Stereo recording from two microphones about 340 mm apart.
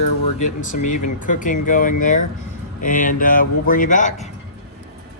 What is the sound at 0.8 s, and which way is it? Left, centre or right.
Speech, left.